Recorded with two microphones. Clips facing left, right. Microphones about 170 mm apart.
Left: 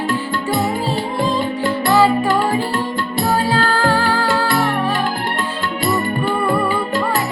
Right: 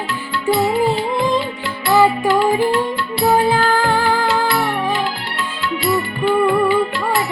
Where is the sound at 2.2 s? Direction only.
45° left (ahead or behind).